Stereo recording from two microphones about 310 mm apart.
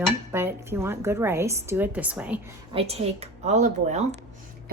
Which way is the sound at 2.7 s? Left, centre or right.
Centre.